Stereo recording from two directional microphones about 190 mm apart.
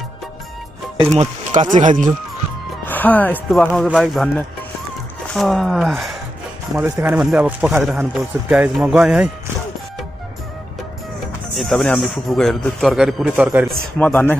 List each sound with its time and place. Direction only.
1.1 s speech: 35° right (ahead or behind)
2.9 s speech: 10° left (ahead or behind)
6.8 s speech: 10° right (ahead or behind)
11.5 s speech: centre (ahead or behind)
13.9 s speech: 10° left (ahead or behind)